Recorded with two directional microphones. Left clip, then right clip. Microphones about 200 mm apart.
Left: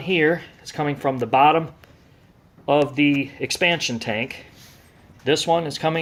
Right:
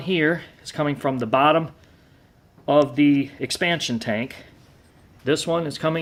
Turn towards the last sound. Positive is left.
turn(degrees=-15)  # may be behind; listen again after turning